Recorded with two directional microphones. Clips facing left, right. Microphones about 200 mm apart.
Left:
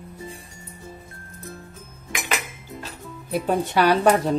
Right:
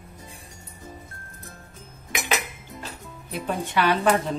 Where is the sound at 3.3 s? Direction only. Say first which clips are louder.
Left 6 dB; 40° left (ahead or behind).